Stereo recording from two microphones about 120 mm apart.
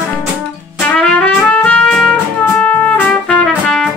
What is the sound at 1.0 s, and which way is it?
Trumpet, 10° left (ahead or behind).